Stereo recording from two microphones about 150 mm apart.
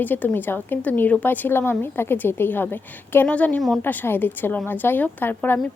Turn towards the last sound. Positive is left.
turn(degrees=15)  # may be behind; listen again after turning